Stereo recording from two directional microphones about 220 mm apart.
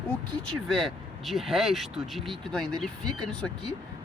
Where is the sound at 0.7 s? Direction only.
Centre (ahead or behind).